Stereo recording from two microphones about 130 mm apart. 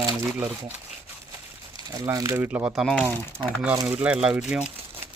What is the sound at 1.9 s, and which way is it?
Speech, 25° right (ahead or behind).